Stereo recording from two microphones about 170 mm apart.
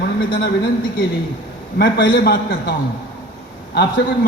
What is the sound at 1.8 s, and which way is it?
Speech, 85° left.